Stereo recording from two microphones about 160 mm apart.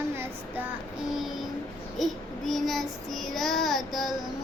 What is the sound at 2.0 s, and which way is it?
Child singing, centre (ahead or behind).